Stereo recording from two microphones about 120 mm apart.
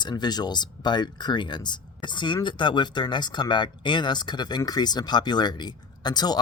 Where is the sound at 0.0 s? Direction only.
35° left (ahead or behind).